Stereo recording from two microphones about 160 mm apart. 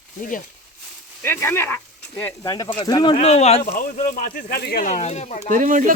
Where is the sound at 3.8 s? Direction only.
55° left (ahead or behind).